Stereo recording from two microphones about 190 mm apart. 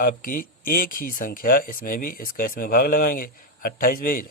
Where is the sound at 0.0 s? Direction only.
45° left (ahead or behind).